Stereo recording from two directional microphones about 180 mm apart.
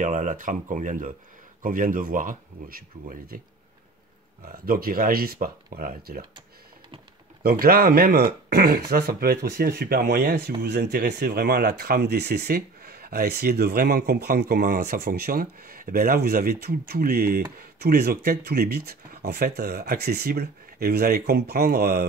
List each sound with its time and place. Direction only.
0.0 s speech: 45° right (ahead or behind)
4.6 s speech: 55° right (ahead or behind)
7.4 s speech: 55° right (ahead or behind)